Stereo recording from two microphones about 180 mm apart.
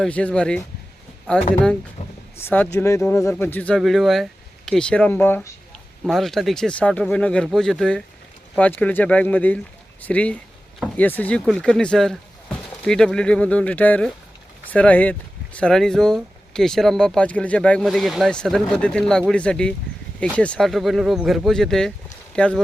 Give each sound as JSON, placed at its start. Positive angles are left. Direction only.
{"t": 0.0, "sound": "speech", "side_deg": 5}
{"t": 2.0, "sound": "a sound", "side_deg": 40}
{"t": 2.4, "sound": "speech", "side_deg": 10}